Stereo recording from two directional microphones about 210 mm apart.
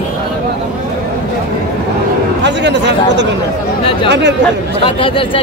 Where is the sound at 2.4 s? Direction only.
55° right (ahead or behind).